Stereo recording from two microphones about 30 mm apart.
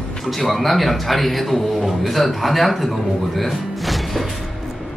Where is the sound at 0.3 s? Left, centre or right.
Centre.